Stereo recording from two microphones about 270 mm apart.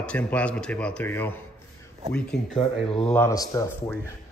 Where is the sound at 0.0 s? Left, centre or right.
Centre.